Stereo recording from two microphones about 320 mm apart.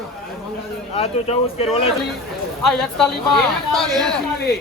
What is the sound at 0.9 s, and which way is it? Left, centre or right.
Speech, centre.